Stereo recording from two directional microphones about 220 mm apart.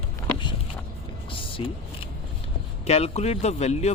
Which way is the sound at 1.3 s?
25° left (ahead or behind).